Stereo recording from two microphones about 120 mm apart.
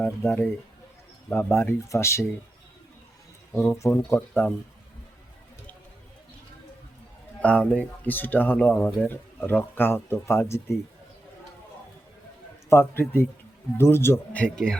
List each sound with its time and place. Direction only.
0.0 s speech: 15° left (ahead or behind)
3.5 s speech: 20° left (ahead or behind)
7.4 s speech: 10° left (ahead or behind)
12.7 s speech: 20° left (ahead or behind)
14.4 s speech: 5° left (ahead or behind)